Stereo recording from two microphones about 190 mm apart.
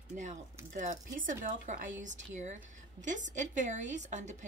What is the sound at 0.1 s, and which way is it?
A woman's voice, 40° right (ahead or behind).